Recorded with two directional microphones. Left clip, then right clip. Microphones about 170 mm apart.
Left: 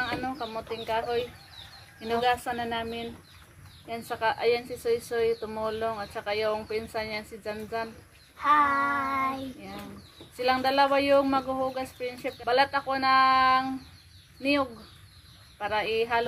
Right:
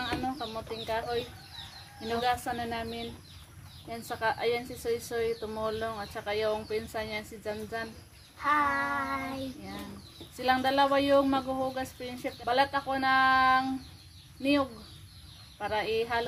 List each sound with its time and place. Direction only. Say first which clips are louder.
0.0 s speech: left 2 dB; 20° right (ahead or behind)
8.4 s speech: left 5 dB; 15° right (ahead or behind)
10.4 s speech: left 2 dB; 25° right (ahead or behind)